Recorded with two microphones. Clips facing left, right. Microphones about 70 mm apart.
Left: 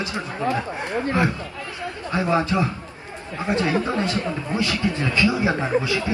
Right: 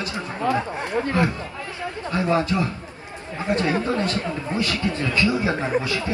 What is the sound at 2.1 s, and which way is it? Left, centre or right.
Speech, left.